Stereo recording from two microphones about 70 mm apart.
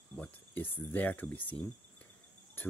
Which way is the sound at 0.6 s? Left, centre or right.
Left.